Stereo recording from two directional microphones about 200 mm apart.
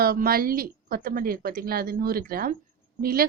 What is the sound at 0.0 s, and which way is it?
A woman's voice, 45° right (ahead or behind).